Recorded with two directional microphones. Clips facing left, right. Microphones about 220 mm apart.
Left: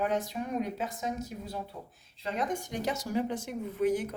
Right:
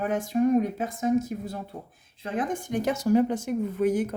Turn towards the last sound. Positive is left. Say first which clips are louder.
# right 4 dB
turn(degrees=-50)  # may be behind; listen again after turning